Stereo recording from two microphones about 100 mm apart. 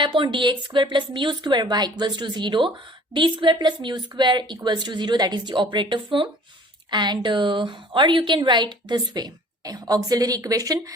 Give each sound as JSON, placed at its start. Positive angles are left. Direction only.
{"t": 0.0, "sound": "a woman's voice", "side_deg": -50}